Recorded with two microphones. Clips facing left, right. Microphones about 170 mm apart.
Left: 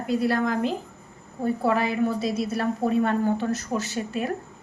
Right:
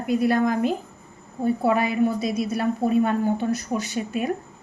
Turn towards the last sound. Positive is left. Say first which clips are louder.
# right 2 dB
turn(degrees=-15)  # may be behind; listen again after turning